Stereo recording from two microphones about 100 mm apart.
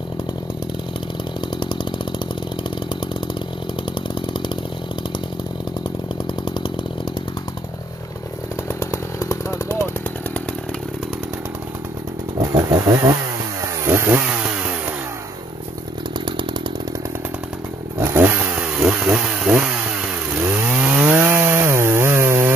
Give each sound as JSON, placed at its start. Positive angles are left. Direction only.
{"t": 3.9, "sound": "chainsaw", "side_deg": 55}
{"t": 6.2, "sound": "chainsaw", "side_deg": 55}
{"t": 8.6, "sound": "chainsaw", "side_deg": 30}
{"t": 12.4, "sound": "chainsaw", "side_deg": -40}
{"t": 16.3, "sound": "chainsaw", "side_deg": -50}
{"t": 17.9, "sound": "chainsaw", "side_deg": -25}
{"t": 18.8, "sound": "chainsaw", "side_deg": -5}
{"t": 20.3, "sound": "chainsaw", "side_deg": -15}